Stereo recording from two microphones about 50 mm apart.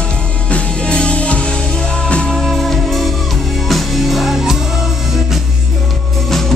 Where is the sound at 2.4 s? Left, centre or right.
Centre.